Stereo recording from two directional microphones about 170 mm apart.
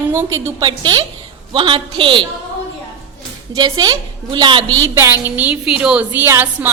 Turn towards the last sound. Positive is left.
turn(degrees=-15)  # may be behind; listen again after turning